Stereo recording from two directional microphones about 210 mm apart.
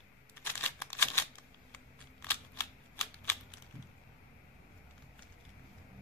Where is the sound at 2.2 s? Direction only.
10° left (ahead or behind).